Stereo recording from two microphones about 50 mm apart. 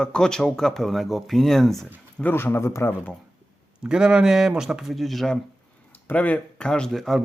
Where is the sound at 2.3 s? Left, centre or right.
Left.